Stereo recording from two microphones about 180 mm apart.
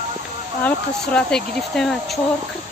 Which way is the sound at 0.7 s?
5° left (ahead or behind).